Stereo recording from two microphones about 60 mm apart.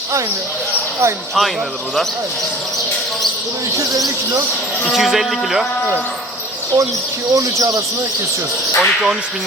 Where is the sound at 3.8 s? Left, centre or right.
Right.